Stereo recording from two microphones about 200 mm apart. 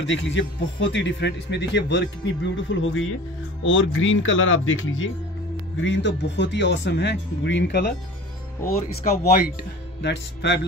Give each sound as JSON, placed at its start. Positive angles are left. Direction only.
{"t": 0.0, "sound": "a man's voice", "side_deg": 65}
{"t": 2.5, "sound": "speech", "side_deg": 75}
{"t": 5.8, "sound": "a man's voice", "side_deg": 65}
{"t": 9.0, "sound": "speech", "side_deg": 40}
{"t": 10.0, "sound": "a man's voice", "side_deg": 60}